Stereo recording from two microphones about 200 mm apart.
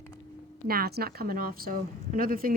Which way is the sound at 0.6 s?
50° right (ahead or behind).